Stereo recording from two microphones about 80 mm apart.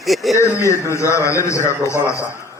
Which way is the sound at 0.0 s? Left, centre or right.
Centre.